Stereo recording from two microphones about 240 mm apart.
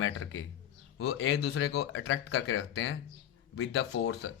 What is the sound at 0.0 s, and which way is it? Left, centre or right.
Speech, left.